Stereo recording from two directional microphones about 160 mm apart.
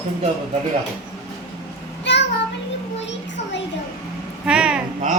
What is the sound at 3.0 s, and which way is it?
Children playing, 90° left.